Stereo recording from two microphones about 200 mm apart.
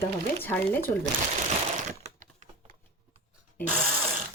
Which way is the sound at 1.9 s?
35° right (ahead or behind).